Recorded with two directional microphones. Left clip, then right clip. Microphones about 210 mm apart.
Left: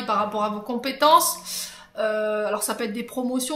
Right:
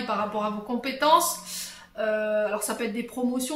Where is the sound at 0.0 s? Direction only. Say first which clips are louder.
Left 4 dB; 45° left (ahead or behind).